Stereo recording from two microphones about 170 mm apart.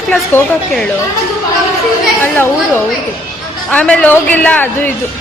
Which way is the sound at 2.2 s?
10° left (ahead or behind).